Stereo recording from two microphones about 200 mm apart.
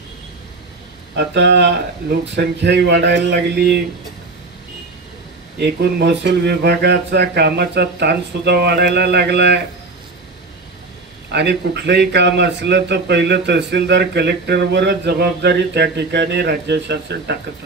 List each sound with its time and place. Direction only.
1.1 s a man's voice: 60° right (ahead or behind)
5.6 s a man's voice: 55° right (ahead or behind)
11.3 s a man's voice: 55° right (ahead or behind)